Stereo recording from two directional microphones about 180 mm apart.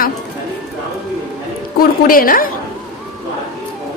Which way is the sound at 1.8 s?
50° left (ahead or behind).